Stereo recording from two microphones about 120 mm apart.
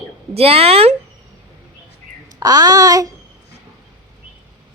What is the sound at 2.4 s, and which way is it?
Speech, 30° right (ahead or behind).